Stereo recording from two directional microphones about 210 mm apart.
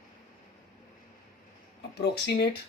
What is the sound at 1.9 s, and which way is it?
Speech, 50° left (ahead or behind).